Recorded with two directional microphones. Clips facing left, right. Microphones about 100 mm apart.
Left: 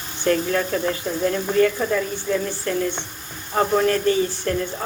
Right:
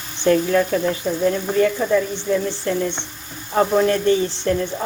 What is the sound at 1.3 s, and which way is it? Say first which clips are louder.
Speech: even; 25° right (ahead or behind).